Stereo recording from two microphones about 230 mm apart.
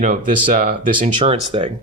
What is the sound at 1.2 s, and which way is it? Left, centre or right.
Speech, right.